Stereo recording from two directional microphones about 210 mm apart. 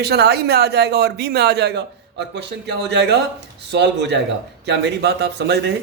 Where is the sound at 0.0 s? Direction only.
50° right (ahead or behind).